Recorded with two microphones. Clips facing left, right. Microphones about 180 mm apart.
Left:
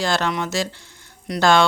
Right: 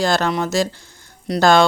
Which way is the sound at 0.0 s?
40° right (ahead or behind).